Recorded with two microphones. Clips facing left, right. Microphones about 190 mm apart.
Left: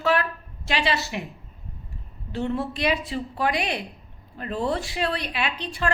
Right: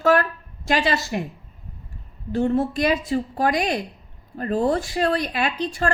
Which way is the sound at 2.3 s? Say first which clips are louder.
Right 6 dB; 45° right (ahead or behind).